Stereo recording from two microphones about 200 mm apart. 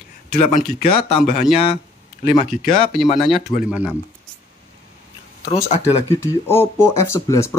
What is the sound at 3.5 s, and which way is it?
Speech, 20° left (ahead or behind).